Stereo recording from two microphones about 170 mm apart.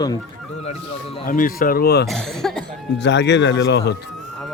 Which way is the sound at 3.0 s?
90° left.